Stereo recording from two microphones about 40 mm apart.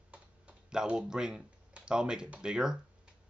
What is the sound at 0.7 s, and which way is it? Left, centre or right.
Speech, centre.